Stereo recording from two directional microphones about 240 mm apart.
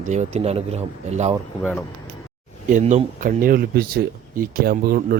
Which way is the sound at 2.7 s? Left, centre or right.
Right.